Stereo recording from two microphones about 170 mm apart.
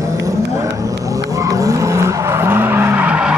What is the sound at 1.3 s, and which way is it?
Skidding, 20° right (ahead or behind).